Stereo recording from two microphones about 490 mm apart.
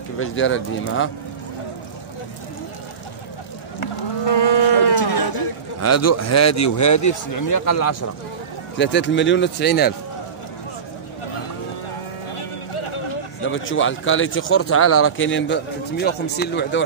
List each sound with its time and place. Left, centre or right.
0.2 s a man's voice: left
4.3 s cattle: left
5.8 s a man's voice: left
12.4 s a sound: left
13.4 s a man's voice: left